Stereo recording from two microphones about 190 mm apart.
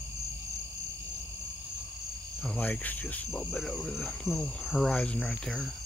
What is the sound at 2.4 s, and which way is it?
Cricket, 10° left (ahead or behind).